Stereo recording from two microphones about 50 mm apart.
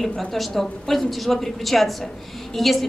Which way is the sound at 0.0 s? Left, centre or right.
Centre.